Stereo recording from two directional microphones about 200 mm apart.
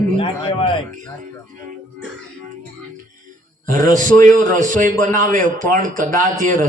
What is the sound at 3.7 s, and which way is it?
Speech, 40° right (ahead or behind).